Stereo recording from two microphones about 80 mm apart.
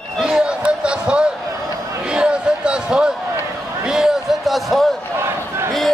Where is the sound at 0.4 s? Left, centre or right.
Centre.